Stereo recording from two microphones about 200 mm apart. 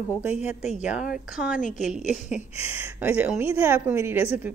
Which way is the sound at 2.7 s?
10° right (ahead or behind).